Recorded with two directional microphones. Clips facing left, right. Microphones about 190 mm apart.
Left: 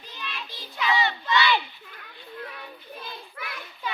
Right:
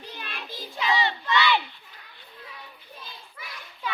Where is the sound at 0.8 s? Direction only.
30° right (ahead or behind).